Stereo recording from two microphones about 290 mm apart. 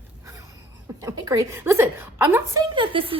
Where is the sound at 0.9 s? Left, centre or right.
Centre.